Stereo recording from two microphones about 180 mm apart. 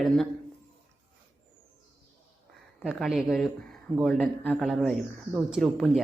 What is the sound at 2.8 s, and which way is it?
Speech, centre (ahead or behind).